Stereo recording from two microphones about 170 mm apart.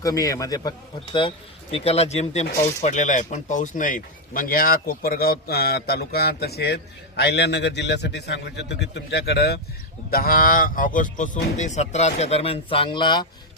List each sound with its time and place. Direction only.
0.0 s a man's voice: 20° left (ahead or behind)
1.7 s speech: 35° left (ahead or behind); by 6.7 s 70° left (ahead or behind)
7.2 s a man's voice: 85° left
10.1 s speech: 60° left (ahead or behind); by 13.2 s 25° left (ahead or behind)